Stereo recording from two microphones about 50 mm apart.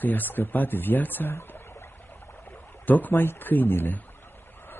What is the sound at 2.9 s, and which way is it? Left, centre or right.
Speech, left.